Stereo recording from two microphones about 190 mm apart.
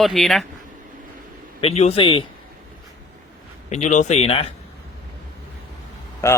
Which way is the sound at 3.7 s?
40° left (ahead or behind).